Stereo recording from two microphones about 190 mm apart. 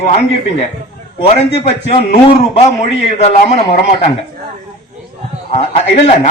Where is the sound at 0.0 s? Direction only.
35° left (ahead or behind).